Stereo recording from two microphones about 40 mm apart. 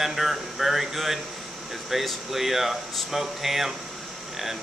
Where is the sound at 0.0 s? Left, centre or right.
Centre.